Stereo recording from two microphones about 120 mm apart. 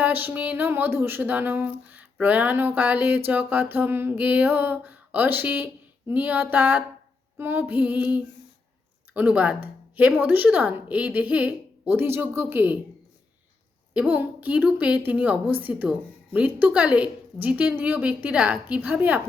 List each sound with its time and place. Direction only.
0.0 s speech: 15° right (ahead or behind)
13.9 s speech: 10° right (ahead or behind)